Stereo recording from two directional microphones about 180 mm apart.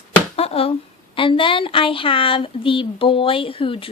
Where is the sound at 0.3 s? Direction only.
35° left (ahead or behind).